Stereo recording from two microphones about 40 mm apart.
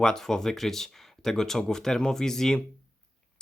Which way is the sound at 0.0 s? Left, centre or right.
Centre.